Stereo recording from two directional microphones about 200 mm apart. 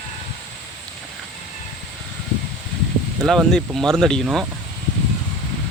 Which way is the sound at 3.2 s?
Centre (ahead or behind).